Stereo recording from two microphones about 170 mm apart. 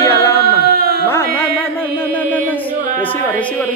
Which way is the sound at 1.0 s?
15° left (ahead or behind).